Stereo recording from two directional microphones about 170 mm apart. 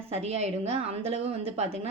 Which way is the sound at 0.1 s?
35° right (ahead or behind).